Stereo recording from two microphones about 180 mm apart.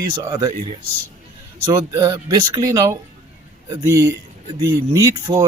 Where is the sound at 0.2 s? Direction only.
20° right (ahead or behind).